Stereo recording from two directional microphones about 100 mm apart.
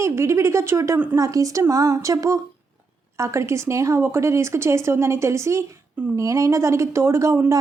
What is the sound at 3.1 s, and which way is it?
Speech, 30° right (ahead or behind).